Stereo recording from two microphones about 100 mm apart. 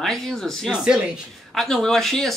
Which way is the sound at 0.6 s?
5° right (ahead or behind).